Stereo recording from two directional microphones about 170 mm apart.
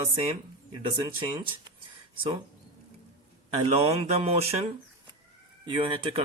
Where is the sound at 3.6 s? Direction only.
35° right (ahead or behind).